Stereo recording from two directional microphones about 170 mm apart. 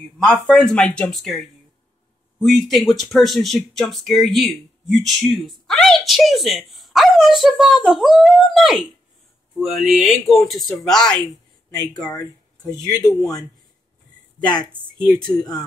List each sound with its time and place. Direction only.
0.2 s speech: 5° left (ahead or behind)
13.0 s speech: 15° left (ahead or behind)
15.0 s speech: 5° left (ahead or behind)